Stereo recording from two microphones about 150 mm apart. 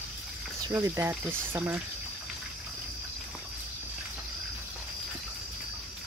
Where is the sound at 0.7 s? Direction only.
15° right (ahead or behind).